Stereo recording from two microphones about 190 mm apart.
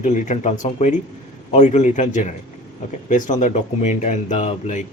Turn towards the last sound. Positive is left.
turn(degrees=35)  # may be behind; listen again after turning